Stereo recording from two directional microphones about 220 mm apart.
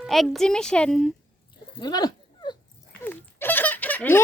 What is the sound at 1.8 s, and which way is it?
Dog, 20° left (ahead or behind).